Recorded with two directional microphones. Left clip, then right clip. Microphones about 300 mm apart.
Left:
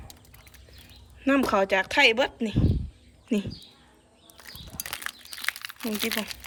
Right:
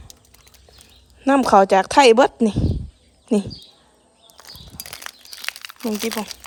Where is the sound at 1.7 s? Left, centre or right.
Right.